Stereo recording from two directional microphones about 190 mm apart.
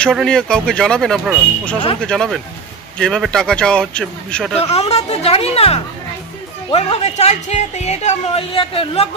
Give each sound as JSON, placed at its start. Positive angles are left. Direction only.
{"t": 0.0, "sound": "speech", "side_deg": 0}
{"t": 4.6, "sound": "speech", "side_deg": 30}